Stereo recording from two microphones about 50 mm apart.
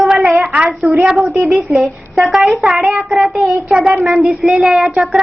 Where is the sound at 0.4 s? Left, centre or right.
Right.